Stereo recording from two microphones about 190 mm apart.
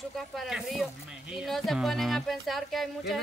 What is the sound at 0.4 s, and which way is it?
Speech, centre (ahead or behind).